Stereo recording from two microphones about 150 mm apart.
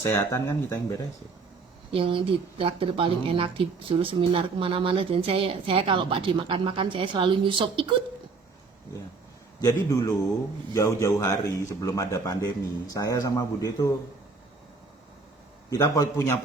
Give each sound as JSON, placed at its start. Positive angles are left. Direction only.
{"t": 0.0, "sound": "a man's voice", "side_deg": 15}
{"t": 1.9, "sound": "speech", "side_deg": -35}
{"t": 9.6, "sound": "a man's voice", "side_deg": 25}
{"t": 15.7, "sound": "a man's voice", "side_deg": 25}